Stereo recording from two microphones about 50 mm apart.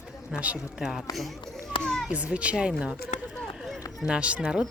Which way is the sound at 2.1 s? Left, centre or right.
Right.